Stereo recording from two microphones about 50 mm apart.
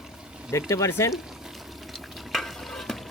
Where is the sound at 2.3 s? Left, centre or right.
Centre.